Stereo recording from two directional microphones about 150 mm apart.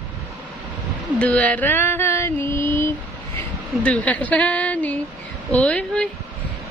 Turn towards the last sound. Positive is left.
turn(degrees=10)  # may be behind; listen again after turning